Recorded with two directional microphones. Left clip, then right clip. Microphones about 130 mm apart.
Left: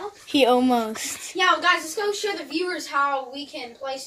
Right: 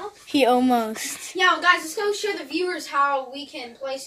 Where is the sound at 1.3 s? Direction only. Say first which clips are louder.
Right 1 dB; 65° right (ahead or behind).